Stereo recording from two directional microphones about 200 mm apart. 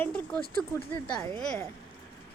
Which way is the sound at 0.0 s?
5° left (ahead or behind).